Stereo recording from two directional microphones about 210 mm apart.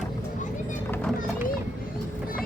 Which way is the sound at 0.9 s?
5° left (ahead or behind).